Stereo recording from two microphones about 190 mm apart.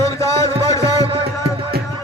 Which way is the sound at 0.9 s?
30° right (ahead or behind).